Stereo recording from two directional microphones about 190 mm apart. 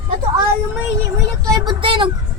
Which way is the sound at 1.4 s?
20° right (ahead or behind).